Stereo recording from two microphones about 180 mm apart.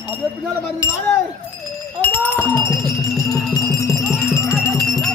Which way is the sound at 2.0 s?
10° left (ahead or behind).